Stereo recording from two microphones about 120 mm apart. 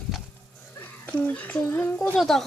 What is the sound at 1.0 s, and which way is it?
A woman's voice, 10° left (ahead or behind).